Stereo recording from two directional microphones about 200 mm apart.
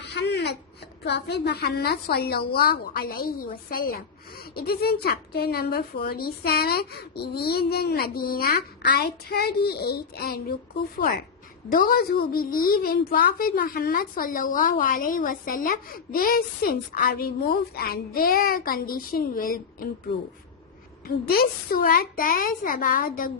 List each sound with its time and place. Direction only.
0.0 s a sound: 60° left (ahead or behind)
1.0 s a woman's voice: 60° left (ahead or behind)
11.7 s a woman's voice: 45° left (ahead or behind)
21.2 s a woman's voice: 50° left (ahead or behind)